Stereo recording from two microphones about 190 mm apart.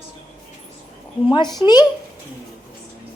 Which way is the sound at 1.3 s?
20° left (ahead or behind).